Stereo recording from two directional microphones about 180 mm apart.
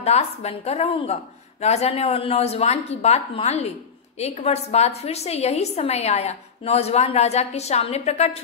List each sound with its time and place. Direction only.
0.0 s a woman's voice: 35° left (ahead or behind)